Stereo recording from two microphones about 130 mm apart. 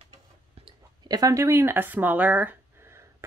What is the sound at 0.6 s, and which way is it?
Speech, 30° right (ahead or behind).